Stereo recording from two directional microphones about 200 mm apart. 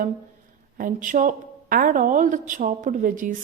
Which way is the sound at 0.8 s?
40° right (ahead or behind).